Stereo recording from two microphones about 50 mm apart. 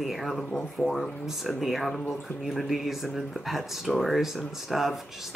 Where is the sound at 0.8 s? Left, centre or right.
Left.